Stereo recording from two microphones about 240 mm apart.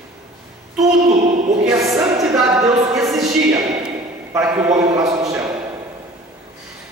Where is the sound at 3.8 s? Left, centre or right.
Centre.